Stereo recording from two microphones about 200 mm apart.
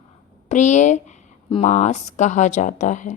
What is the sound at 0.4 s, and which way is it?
A woman's voice, 35° left (ahead or behind).